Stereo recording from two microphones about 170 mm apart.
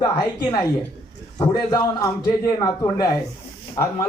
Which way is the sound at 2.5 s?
25° left (ahead or behind).